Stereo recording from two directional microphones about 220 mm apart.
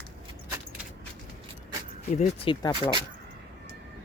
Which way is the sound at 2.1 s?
25° left (ahead or behind).